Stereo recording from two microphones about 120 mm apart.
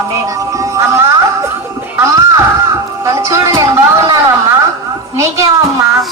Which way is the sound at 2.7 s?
25° right (ahead or behind).